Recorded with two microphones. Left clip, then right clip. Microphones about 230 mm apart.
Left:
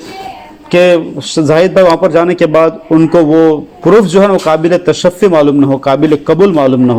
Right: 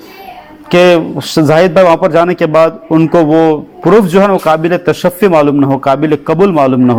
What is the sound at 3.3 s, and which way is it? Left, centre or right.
Speech, right.